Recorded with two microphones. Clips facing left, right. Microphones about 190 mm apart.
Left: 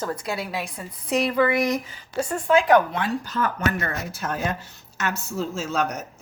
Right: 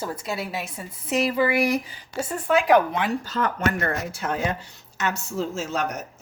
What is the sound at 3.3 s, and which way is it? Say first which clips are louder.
Speech: even; 30° right (ahead or behind).